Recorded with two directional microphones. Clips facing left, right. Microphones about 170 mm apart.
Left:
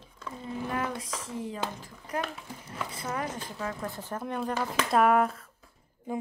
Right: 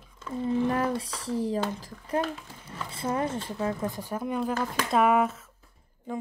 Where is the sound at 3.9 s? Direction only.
10° right (ahead or behind).